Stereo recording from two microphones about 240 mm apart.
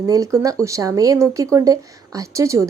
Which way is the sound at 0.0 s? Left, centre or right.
Centre.